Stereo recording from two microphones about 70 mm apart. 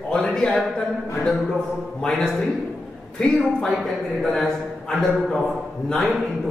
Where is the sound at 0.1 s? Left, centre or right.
Centre.